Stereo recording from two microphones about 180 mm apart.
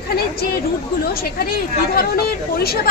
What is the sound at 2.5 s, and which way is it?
Speech, 60° left (ahead or behind).